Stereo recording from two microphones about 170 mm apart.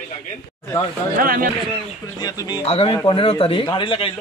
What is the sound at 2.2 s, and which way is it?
Speech, 20° left (ahead or behind).